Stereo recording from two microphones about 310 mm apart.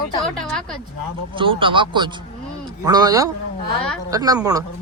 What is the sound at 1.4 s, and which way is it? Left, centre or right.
A man's voice, centre.